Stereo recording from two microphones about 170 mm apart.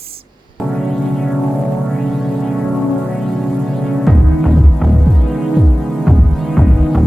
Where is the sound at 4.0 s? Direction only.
Centre (ahead or behind).